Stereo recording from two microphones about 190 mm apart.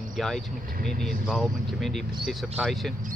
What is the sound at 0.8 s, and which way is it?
Speech, centre (ahead or behind).